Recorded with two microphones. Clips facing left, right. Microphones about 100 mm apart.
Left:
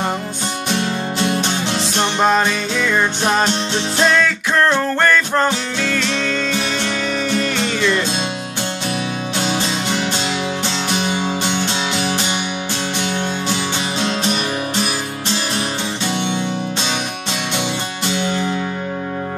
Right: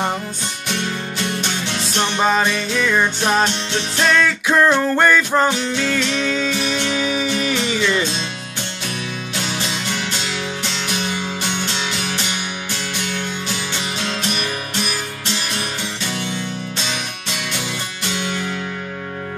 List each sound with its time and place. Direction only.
0.7 s music: 35° left (ahead or behind)
2.1 s music: centre (ahead or behind)
9.5 s music: 35° left (ahead or behind)